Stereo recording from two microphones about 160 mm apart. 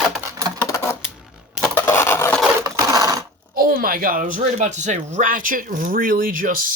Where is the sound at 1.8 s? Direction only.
15° left (ahead or behind).